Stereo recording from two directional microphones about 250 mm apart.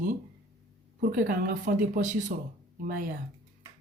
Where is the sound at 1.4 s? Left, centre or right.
Right.